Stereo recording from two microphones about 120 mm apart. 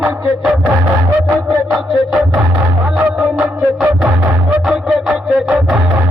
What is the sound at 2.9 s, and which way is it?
Music, 10° right (ahead or behind).